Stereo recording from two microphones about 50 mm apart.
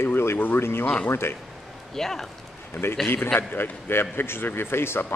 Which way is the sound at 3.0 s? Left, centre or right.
Left.